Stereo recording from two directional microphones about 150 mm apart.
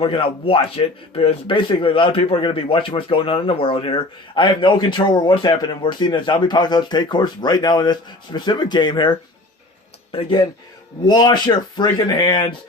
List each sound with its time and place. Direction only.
0.0 s a man's voice: 35° left (ahead or behind)